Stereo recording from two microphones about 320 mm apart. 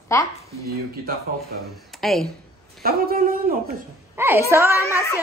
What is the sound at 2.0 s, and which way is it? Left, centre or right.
Speech, centre.